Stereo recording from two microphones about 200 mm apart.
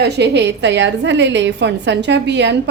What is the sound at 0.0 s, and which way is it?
A woman's voice, 55° right (ahead or behind).